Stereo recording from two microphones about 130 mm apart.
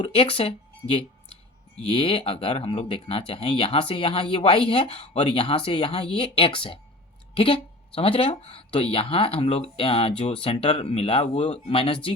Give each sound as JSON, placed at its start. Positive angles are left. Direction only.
{"t": 0.0, "sound": "speech", "side_deg": 45}